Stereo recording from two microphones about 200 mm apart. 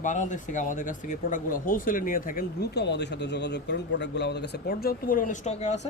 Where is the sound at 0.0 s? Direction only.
40° left (ahead or behind).